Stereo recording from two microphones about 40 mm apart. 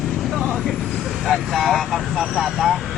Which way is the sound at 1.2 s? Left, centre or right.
Centre.